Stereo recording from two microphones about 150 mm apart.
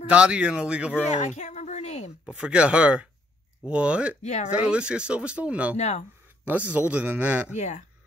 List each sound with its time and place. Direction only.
0.1 s speech: 5° right (ahead or behind)
1.0 s a sound: 50° left (ahead or behind)
2.2 s speech: 5° right (ahead or behind)
4.2 s speech: 50° left (ahead or behind)
4.5 s speech: 5° right (ahead or behind)
5.8 s speech: 50° left (ahead or behind)
6.7 s speech: 10° right (ahead or behind)
7.5 s speech: 50° left (ahead or behind)